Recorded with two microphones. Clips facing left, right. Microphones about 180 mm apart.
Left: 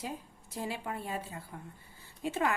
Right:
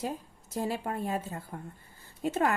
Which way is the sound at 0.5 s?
45° right (ahead or behind).